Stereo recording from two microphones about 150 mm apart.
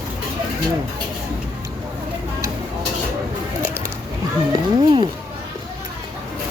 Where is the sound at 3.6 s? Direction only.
15° right (ahead or behind).